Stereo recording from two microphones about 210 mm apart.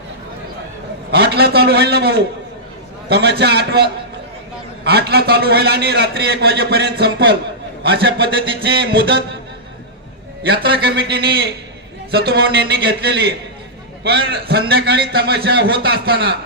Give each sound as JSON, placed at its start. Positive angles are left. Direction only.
{"t": 1.1, "sound": "a man's voice", "side_deg": -50}
{"t": 10.4, "sound": "a man's voice", "side_deg": -50}